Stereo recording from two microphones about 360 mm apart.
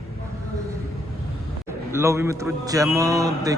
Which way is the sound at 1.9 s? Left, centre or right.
Centre.